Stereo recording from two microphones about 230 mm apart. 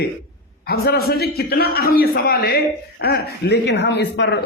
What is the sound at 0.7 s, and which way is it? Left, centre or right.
A man's voice, left.